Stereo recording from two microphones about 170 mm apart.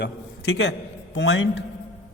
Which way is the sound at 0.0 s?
85° left.